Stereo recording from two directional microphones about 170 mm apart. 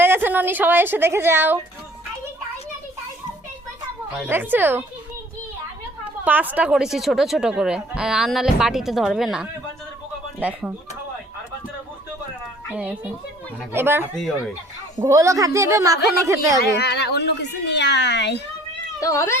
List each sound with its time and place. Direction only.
0.0 s a woman's voice: 10° right (ahead or behind)
4.3 s speech: 10° right (ahead or behind)
6.2 s speech: 10° right (ahead or behind)
12.7 s a woman's voice: 5° right (ahead or behind)
16.8 s a child's voice: 85° left
18.9 s speech: 20° left (ahead or behind)